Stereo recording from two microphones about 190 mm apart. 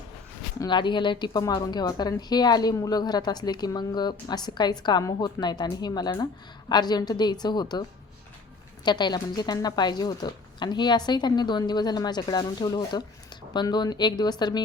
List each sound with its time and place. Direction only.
0.6 s speech: 25° left (ahead or behind)